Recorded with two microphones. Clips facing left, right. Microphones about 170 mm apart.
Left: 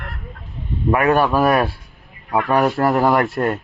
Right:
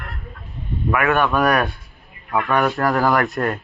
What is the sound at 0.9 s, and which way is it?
Speech, 35° left (ahead or behind).